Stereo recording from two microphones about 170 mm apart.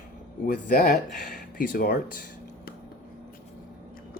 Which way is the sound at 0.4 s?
50° left (ahead or behind).